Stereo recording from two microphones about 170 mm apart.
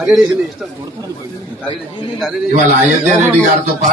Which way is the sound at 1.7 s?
25° left (ahead or behind).